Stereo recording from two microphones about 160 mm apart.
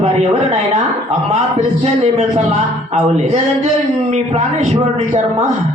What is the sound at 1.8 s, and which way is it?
A man's voice, 40° right (ahead or behind).